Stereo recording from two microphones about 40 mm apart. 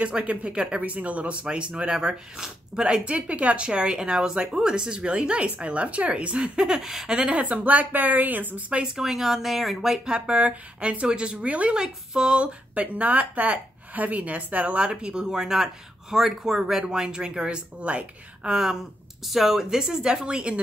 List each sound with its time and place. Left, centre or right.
0.2 s speech: right; by 3.0 s centre
3.1 s speech: right
6.6 s speech: centre
7.1 s speech: right
8.9 s speech: centre
10.0 s speech: right
11.4 s speech: right
11.7 s speech: centre; by 14.8 s right
14.8 s speech: right
18.5 s speech: centre